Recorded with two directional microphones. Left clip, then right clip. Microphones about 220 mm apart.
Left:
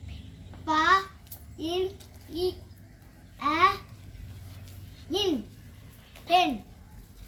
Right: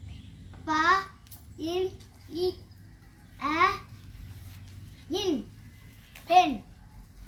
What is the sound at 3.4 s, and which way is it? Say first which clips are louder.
Babbling: left 2 dB; 10° right (ahead or behind).